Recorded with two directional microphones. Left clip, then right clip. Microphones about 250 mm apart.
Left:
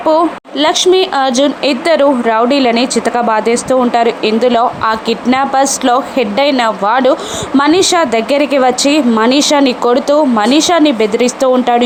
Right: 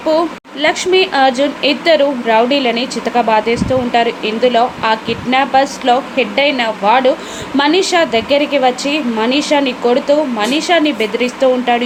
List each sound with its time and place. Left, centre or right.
0.6 s speech: left